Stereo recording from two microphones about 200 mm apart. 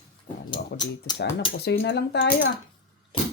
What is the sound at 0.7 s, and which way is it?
Speech, 55° left (ahead or behind).